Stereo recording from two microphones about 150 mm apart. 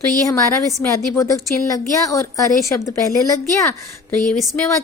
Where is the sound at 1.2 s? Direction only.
20° left (ahead or behind).